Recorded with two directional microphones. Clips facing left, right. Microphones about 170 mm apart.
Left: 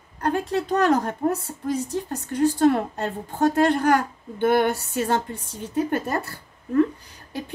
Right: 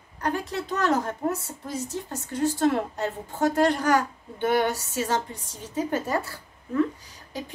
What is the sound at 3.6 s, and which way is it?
A woman's voice, 55° left (ahead or behind).